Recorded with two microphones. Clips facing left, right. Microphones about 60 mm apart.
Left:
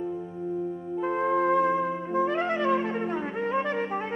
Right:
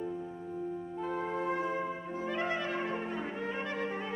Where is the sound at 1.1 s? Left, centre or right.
Left.